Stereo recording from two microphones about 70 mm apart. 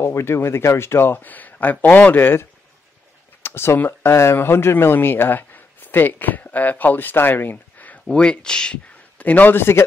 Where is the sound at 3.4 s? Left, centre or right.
Left.